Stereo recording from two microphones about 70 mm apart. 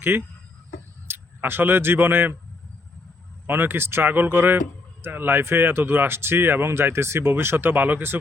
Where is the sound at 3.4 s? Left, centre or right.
Right.